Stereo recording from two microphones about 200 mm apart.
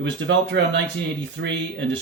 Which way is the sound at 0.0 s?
60° right (ahead or behind).